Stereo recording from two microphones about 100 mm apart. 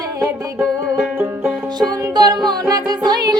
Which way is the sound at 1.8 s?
45° right (ahead or behind).